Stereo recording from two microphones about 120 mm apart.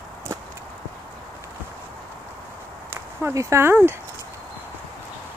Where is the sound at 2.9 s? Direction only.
20° right (ahead or behind).